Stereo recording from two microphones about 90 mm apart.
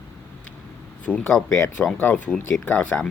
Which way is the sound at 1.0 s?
15° left (ahead or behind).